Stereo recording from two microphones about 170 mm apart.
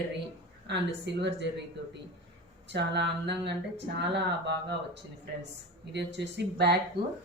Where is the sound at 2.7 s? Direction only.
90° right.